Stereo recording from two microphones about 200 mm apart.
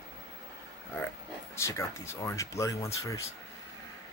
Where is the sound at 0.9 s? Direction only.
10° left (ahead or behind).